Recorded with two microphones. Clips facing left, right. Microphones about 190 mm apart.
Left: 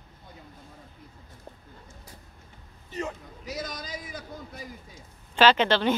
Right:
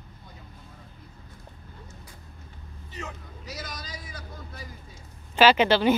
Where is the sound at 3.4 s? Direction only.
20° left (ahead or behind).